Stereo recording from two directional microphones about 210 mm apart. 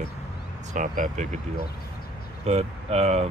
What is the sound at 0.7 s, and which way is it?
Speech, 35° right (ahead or behind).